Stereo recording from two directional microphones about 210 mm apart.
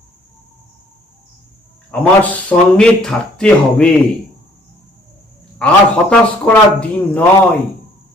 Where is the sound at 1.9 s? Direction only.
5° left (ahead or behind).